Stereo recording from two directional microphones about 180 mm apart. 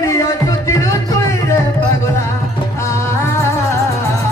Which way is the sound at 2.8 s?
15° left (ahead or behind).